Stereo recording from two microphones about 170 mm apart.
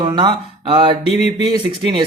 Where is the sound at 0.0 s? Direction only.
25° right (ahead or behind).